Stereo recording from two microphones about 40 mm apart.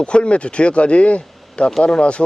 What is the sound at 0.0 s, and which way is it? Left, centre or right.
Speech, left.